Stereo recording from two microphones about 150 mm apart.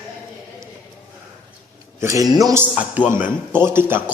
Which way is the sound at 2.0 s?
20° right (ahead or behind).